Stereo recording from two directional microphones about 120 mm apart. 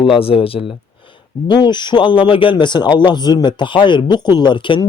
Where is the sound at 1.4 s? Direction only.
40° left (ahead or behind).